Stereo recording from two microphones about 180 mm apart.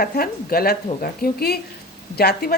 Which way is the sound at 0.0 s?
55° left (ahead or behind).